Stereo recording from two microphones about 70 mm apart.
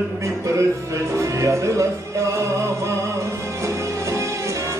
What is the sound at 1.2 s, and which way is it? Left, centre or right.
Music, right.